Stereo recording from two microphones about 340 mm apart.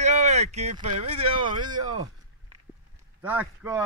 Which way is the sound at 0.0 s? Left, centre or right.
Centre.